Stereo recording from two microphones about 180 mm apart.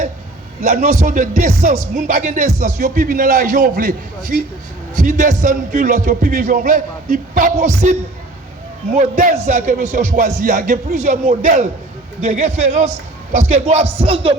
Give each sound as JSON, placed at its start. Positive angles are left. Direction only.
{"t": 0.6, "sound": "speech", "side_deg": -40}
{"t": 9.0, "sound": "a man's voice", "side_deg": -45}